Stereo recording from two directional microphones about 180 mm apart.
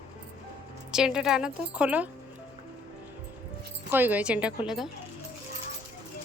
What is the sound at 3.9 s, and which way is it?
Speech, 10° right (ahead or behind).